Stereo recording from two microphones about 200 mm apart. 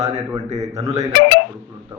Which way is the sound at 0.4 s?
35° right (ahead or behind).